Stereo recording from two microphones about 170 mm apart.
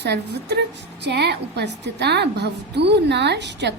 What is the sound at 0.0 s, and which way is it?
A woman's voice, 75° right (ahead or behind).